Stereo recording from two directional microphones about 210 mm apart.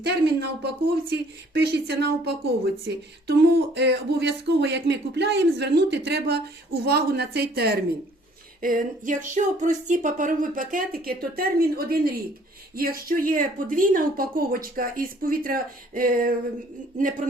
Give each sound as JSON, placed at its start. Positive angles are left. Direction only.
{"t": 0.0, "sound": "speech", "side_deg": -50}